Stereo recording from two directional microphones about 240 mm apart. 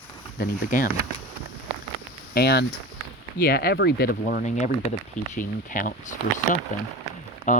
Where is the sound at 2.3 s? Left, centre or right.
Left.